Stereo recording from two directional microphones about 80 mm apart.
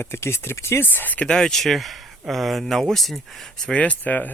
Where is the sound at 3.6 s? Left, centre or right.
Centre.